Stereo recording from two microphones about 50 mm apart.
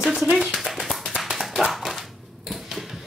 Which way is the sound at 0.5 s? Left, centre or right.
Centre.